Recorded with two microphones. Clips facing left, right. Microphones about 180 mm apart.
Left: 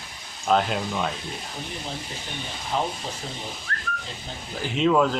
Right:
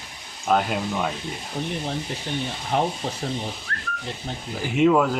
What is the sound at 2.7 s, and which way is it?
Speech, 60° right (ahead or behind).